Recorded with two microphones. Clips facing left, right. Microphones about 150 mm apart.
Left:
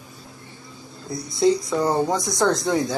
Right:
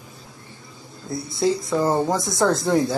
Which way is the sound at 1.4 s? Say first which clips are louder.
Left 2 dB; centre (ahead or behind).